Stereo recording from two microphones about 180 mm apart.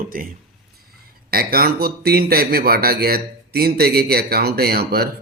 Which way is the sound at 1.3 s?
60° right (ahead or behind).